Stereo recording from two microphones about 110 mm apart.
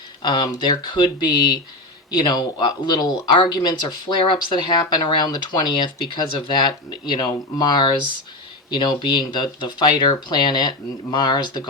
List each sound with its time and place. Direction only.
0.2 s speech: 45° left (ahead or behind)